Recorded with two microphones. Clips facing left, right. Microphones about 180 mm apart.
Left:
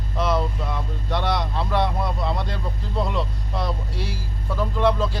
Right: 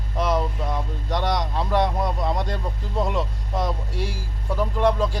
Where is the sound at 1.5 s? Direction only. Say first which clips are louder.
Right 1 dB; 15° right (ahead or behind).